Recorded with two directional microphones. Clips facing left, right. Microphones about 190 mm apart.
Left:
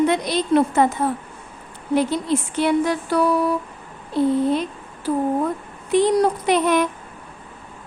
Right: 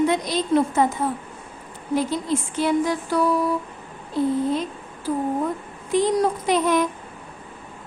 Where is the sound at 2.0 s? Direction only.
70° left (ahead or behind).